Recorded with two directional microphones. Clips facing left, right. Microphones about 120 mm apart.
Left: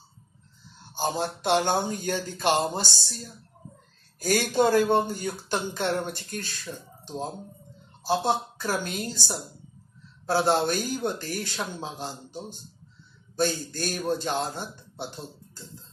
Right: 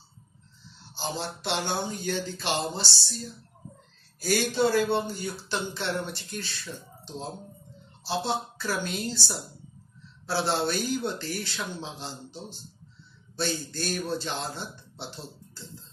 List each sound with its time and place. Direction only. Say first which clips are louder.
0.7 s speech: left 6 dB; 50° left (ahead or behind)
10.2 s speech: left 4 dB; 45° left (ahead or behind)
13.4 s speech: left 4 dB; 45° left (ahead or behind)